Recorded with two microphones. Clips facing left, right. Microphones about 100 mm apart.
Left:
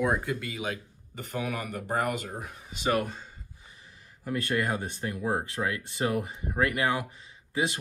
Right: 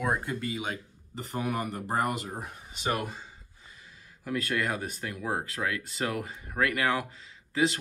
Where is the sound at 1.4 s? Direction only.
35° right (ahead or behind).